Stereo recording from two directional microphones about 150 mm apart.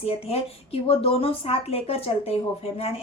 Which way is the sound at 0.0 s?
40° left (ahead or behind).